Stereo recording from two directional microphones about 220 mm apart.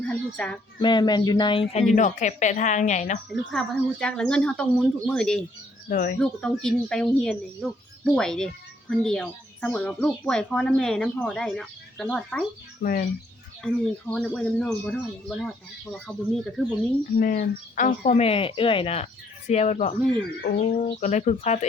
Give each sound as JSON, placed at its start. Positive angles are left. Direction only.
{"t": 0.1, "sound": "speech", "side_deg": 5}
{"t": 0.8, "sound": "speech", "side_deg": 20}
{"t": 3.2, "sound": "speech", "side_deg": 0}
{"t": 5.9, "sound": "speech", "side_deg": 40}
{"t": 6.1, "sound": "speech", "side_deg": 5}
{"t": 12.8, "sound": "speech", "side_deg": 40}
{"t": 13.6, "sound": "speech", "side_deg": 0}
{"t": 17.2, "sound": "speech", "side_deg": 40}